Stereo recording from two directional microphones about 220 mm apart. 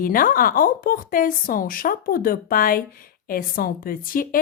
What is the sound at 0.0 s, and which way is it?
A woman's voice, 40° left (ahead or behind).